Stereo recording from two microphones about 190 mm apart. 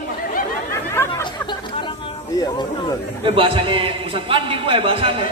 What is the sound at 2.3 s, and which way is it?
Speech, 20° left (ahead or behind).